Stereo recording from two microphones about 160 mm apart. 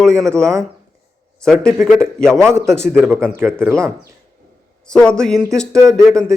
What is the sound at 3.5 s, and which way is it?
Speech, 5° left (ahead or behind).